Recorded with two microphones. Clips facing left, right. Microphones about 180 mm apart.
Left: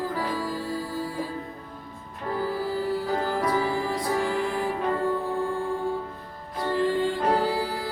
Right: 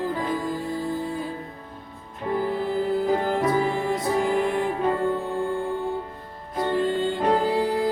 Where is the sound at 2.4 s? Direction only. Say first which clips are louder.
Right 1 dB; 20° right (ahead or behind).